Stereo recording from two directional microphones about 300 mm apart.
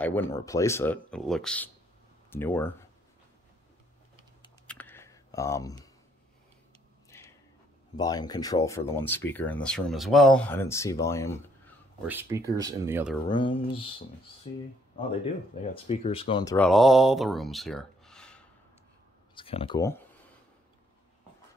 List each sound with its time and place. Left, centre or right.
0.0 s speech: centre
4.6 s a sound: centre
7.1 s a sound: centre
7.9 s speech: centre
12.1 s speech: centre
13.3 s speech: centre
15.7 s speech: centre
19.3 s speech: centre